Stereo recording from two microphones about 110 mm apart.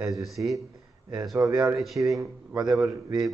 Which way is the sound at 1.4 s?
30° right (ahead or behind).